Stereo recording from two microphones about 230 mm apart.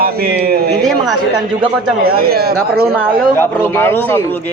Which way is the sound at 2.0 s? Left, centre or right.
Right.